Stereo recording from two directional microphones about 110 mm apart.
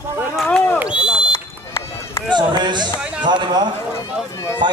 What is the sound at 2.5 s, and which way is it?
A man's voice, 40° right (ahead or behind).